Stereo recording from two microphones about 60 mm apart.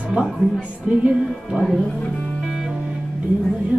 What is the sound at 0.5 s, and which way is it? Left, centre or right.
Music, centre.